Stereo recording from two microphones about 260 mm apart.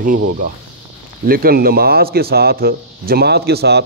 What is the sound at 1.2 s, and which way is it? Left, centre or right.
A man's voice, right.